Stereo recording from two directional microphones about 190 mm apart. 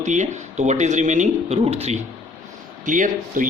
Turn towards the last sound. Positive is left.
turn(degrees=-45)  # may be behind; listen again after turning